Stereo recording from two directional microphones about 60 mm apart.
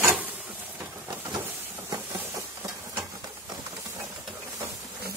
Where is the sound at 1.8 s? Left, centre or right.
Right.